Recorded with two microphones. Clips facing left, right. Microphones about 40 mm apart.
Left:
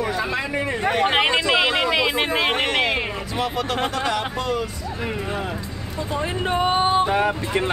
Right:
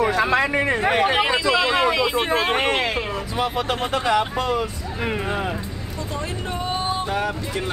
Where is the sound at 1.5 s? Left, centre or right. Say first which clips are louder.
Even; left.